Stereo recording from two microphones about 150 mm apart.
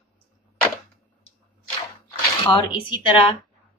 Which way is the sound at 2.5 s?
35° left (ahead or behind).